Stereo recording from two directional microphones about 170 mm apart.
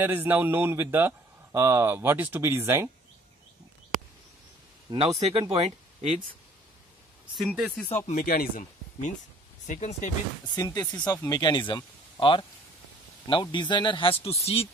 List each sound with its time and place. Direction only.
0.0 s speech: 10° right (ahead or behind)
4.9 s speech: 25° right (ahead or behind)
7.3 s speech: 5° right (ahead or behind)
8.1 s speech: 55° left (ahead or behind)
10.5 s speech: 20° left (ahead or behind); by 14.7 s 35° left (ahead or behind)